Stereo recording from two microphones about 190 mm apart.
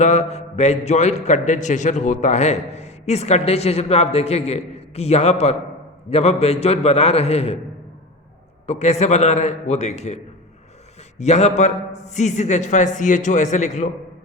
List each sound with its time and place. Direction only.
0.0 s a man's voice: 35° left (ahead or behind)
8.6 s a man's voice: 35° left (ahead or behind)
11.2 s a man's voice: 35° left (ahead or behind)